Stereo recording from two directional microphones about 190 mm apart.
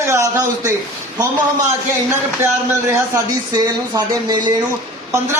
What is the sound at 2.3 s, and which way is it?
A man's voice, 15° right (ahead or behind).